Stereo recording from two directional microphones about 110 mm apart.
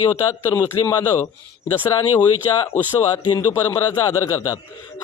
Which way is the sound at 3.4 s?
20° left (ahead or behind).